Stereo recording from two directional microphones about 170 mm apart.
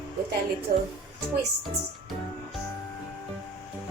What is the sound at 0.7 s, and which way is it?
Speech, 50° right (ahead or behind).